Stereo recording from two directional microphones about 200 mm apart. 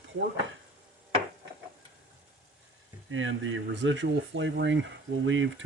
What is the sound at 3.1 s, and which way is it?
Speech, 70° right (ahead or behind).